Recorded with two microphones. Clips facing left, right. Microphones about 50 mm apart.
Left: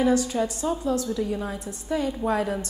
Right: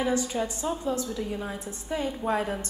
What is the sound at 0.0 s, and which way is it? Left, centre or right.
A woman's voice, centre.